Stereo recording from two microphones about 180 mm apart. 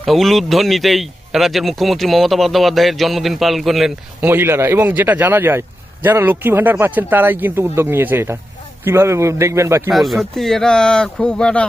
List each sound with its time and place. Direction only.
0.0 s a man's voice: centre (ahead or behind)
4.3 s a man's voice: 15° right (ahead or behind)
9.9 s a man's voice: centre (ahead or behind)